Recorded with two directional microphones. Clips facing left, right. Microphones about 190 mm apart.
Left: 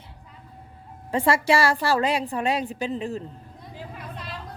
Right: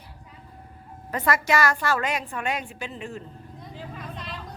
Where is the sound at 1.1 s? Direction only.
30° left (ahead or behind).